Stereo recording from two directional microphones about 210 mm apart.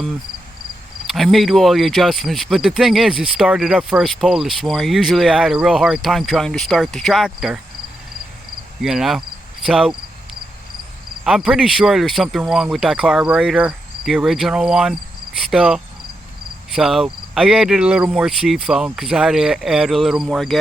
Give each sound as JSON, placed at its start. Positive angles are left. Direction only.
{"t": 1.0, "sound": "speech", "side_deg": 0}
{"t": 8.8, "sound": "speech", "side_deg": 0}
{"t": 11.2, "sound": "speech", "side_deg": 0}